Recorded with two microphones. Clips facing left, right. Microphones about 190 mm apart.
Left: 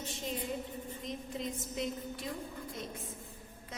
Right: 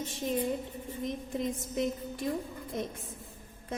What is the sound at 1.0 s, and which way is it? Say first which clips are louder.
Speech: right 7 dB; 50° right (ahead or behind).